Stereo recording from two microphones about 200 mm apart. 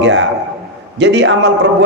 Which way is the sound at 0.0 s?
70° right (ahead or behind).